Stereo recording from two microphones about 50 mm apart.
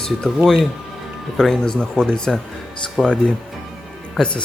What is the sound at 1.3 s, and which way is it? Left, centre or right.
Speech, centre.